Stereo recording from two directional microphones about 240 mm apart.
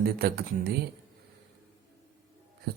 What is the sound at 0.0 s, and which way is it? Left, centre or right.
Speech, right.